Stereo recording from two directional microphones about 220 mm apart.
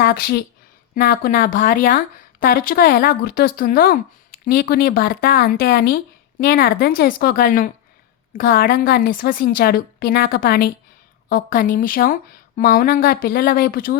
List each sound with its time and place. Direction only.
0.0 s a woman's voice: 45° left (ahead or behind)